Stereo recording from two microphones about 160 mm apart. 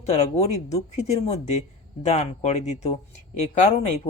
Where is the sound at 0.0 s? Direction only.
45° left (ahead or behind).